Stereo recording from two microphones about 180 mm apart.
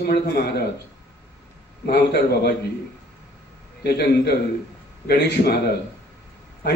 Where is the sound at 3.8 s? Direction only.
65° left (ahead or behind).